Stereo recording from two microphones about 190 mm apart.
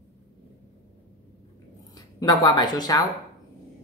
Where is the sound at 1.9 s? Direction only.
20° left (ahead or behind).